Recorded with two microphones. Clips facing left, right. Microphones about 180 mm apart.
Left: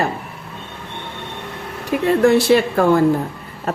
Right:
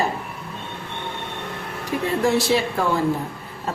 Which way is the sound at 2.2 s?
60° left (ahead or behind).